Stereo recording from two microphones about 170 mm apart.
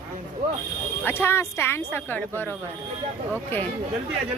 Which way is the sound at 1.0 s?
15° left (ahead or behind).